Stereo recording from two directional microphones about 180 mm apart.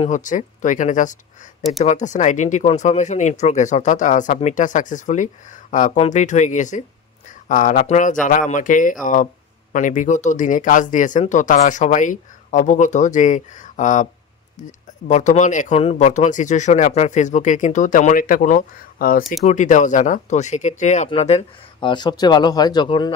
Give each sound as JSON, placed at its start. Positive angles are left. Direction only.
{"t": 0.0, "sound": "speech", "side_deg": 45}
{"t": 19.4, "sound": "speech", "side_deg": 45}